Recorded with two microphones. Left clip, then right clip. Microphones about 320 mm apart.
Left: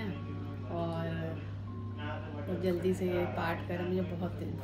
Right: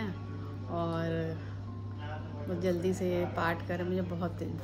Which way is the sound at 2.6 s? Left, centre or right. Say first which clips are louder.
Right 1 dB; centre.